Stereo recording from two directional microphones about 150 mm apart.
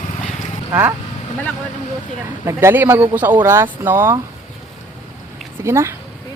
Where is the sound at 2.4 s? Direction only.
20° right (ahead or behind).